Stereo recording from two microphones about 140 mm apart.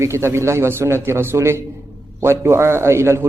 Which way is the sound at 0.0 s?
20° right (ahead or behind).